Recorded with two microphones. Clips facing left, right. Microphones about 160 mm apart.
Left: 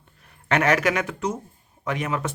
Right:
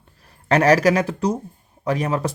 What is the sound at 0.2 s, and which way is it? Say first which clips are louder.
Speech: right 5 dB; 35° right (ahead or behind).